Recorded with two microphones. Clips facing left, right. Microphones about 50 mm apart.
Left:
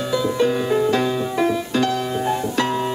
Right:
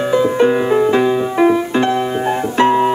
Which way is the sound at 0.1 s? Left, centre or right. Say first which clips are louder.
Right 6 dB; right.